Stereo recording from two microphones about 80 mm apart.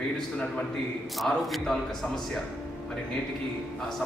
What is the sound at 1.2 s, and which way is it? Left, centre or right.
Speech, centre.